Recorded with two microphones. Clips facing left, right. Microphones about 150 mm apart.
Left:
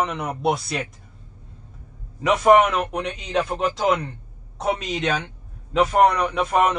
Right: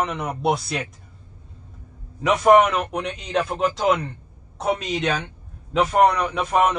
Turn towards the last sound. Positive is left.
turn(degrees=0)  # may be behind; listen again after turning